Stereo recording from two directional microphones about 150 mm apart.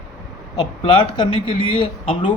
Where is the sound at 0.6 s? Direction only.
30° left (ahead or behind).